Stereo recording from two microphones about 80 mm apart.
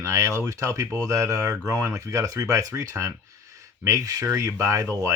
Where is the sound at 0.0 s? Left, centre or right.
Right.